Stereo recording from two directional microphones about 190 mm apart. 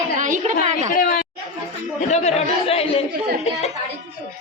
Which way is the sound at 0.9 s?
50° left (ahead or behind).